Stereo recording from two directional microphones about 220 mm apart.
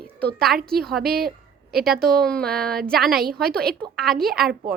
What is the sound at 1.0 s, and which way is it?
Speech, 45° right (ahead or behind).